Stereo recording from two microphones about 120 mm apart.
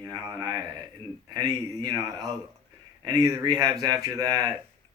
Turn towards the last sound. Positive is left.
turn(degrees=-30)  # may be behind; listen again after turning